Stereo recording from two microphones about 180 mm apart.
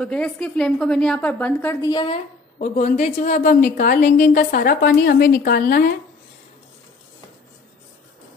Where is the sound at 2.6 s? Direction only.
45° left (ahead or behind).